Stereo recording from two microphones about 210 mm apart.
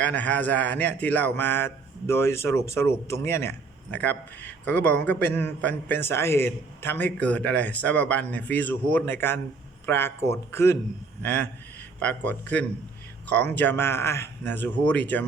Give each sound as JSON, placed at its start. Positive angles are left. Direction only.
{"t": 0.0, "sound": "a man's voice", "side_deg": 5}